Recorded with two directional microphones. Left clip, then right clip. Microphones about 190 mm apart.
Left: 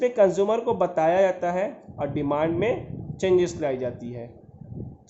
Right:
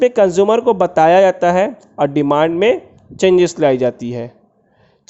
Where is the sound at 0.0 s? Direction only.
45° right (ahead or behind).